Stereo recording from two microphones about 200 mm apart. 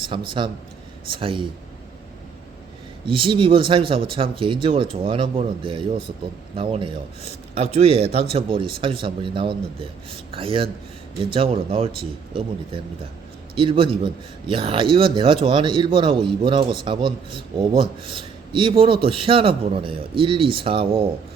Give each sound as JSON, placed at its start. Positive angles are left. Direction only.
{"t": 0.3, "sound": "a man's voice", "side_deg": -25}
{"t": 3.1, "sound": "a man's voice", "side_deg": -25}